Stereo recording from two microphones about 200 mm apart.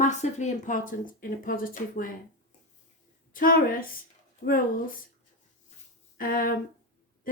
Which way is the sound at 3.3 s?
45° left (ahead or behind).